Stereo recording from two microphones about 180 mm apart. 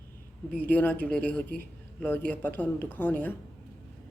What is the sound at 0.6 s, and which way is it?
A woman's voice, 10° left (ahead or behind).